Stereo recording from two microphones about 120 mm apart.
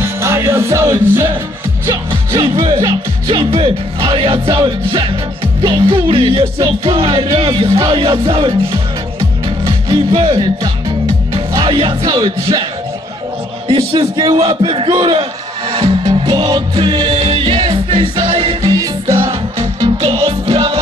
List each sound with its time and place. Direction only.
0.0 s music: 25° right (ahead or behind)
1.9 s music: 45° right (ahead or behind)
13.7 s a man's voice: 40° right (ahead or behind)
15.7 s music: 40° right (ahead or behind)
18.7 s music: 30° right (ahead or behind)
19.2 s music: 45° right (ahead or behind)